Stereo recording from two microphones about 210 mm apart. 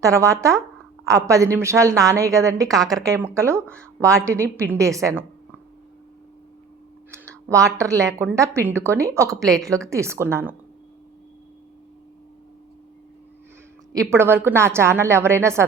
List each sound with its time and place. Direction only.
0.0 s a woman's voice: 15° right (ahead or behind)
7.1 s a woman's voice: 15° right (ahead or behind)
9.4 s a woman's voice: centre (ahead or behind)
9.6 s a woman's voice: 15° right (ahead or behind)
13.9 s a woman's voice: 15° right (ahead or behind)